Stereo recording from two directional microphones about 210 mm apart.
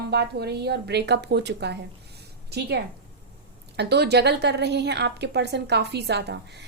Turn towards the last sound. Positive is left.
turn(degrees=-55)  # may be behind; listen again after turning